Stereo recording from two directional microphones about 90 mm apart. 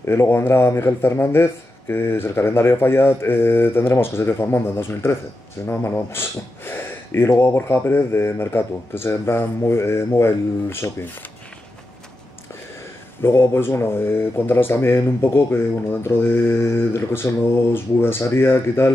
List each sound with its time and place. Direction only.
0.0 s speech: 30° left (ahead or behind)
13.2 s speech: 30° left (ahead or behind)